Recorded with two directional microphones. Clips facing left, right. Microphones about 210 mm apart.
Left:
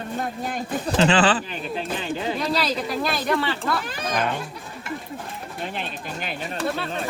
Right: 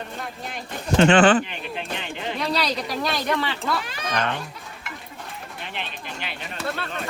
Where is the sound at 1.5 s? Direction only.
35° left (ahead or behind).